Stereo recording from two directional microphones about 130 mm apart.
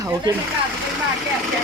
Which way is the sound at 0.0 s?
35° right (ahead or behind).